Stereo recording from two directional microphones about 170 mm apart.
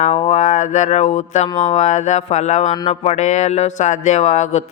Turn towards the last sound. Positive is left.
turn(degrees=40)  # may be behind; listen again after turning